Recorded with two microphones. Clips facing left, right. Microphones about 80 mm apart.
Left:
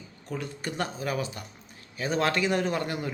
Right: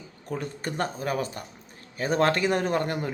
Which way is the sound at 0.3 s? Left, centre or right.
Right.